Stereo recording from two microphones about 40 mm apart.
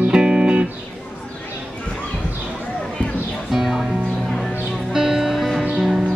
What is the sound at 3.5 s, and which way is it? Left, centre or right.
Music, centre.